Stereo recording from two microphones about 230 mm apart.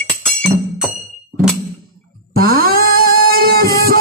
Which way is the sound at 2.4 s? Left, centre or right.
Right.